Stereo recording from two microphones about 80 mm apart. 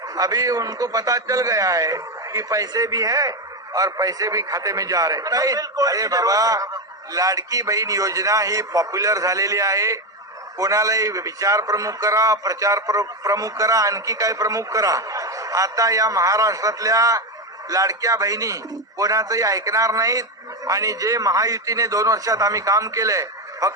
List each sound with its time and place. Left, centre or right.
0.2 s a man's voice: right